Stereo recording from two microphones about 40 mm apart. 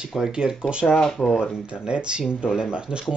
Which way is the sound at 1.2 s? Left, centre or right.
Left.